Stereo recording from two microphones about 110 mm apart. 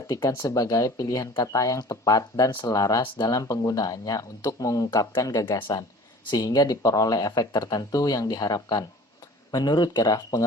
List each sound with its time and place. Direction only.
0.1 s speech: 30° left (ahead or behind)
5.5 s speech: 45° left (ahead or behind)